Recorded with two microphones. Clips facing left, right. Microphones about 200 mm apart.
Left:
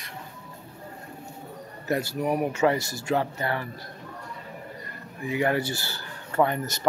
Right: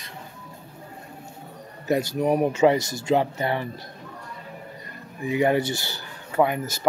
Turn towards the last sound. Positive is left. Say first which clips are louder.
# right 2 dB
turn(degrees=-10)  # may be behind; listen again after turning